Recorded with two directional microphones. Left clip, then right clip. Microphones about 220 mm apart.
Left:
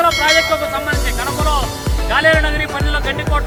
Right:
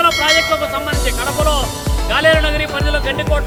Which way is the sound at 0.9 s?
10° right (ahead or behind).